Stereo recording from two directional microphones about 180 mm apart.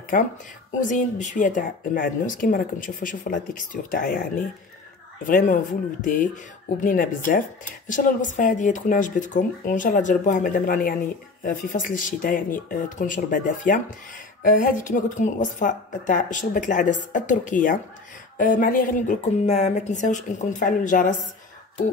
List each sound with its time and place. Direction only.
0.7 s speech: 45° left (ahead or behind)